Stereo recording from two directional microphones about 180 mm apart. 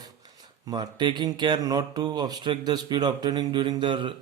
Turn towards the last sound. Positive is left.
turn(degrees=-25)  # may be behind; listen again after turning